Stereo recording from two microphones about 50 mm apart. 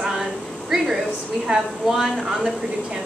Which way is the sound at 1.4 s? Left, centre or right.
Centre.